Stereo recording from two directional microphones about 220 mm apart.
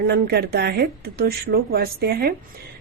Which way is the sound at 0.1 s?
45° right (ahead or behind).